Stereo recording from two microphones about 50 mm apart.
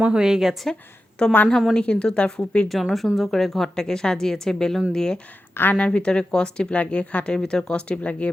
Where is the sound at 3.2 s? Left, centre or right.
Centre.